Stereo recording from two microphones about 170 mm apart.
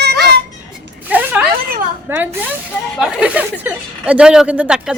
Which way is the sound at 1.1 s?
10° right (ahead or behind).